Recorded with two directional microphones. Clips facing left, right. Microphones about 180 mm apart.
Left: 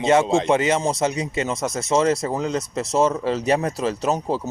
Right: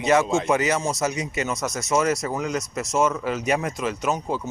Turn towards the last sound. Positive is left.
turn(degrees=35)  # may be behind; listen again after turning